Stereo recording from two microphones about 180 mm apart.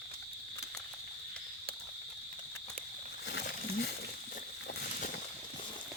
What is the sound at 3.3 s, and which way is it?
Wild animals, 70° left (ahead or behind).